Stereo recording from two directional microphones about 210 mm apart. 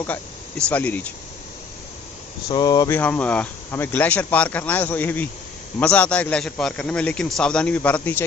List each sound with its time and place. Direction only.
0.0 s speech: 5° left (ahead or behind)
2.5 s speech: 20° left (ahead or behind)
3.0 s a man's voice: 5° left (ahead or behind)